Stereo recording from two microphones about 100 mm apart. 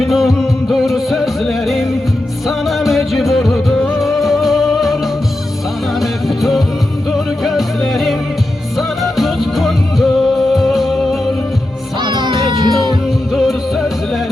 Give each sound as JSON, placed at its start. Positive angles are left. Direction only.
{"t": 0.0, "sound": "music", "side_deg": 0}
{"t": 6.0, "sound": "music", "side_deg": 0}
{"t": 9.1, "sound": "music", "side_deg": 0}
{"t": 12.0, "sound": "music", "side_deg": -50}
{"t": 13.3, "sound": "music", "side_deg": -5}